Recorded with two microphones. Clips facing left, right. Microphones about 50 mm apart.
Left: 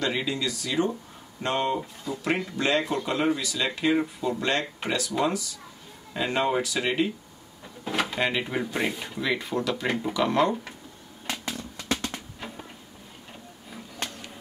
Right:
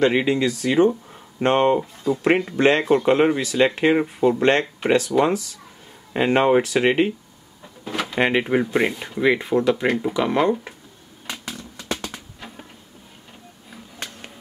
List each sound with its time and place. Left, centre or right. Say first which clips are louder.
0.0 s speech: right 9 dB; right
6.1 s speech: right 8 dB; right
7.8 s drawer open or close: right 1 dB; centre
8.2 s speech: right 8 dB; right; by 10.7 s centre
11.2 s a sound: even; centre